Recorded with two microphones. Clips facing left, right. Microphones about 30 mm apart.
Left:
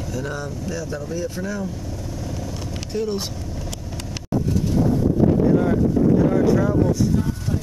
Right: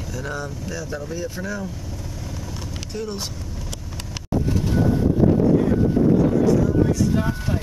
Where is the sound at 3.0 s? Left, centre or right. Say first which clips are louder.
Left 5 dB; centre.